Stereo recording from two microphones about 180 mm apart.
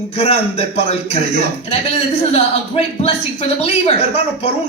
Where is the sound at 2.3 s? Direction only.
35° left (ahead or behind).